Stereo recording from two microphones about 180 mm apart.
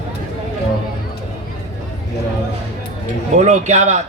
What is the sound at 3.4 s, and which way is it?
Speech, 40° right (ahead or behind).